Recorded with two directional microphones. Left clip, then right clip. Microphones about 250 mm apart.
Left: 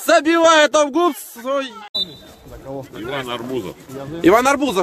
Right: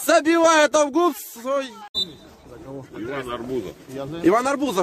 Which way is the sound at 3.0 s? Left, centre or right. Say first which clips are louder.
Left 3 dB; left.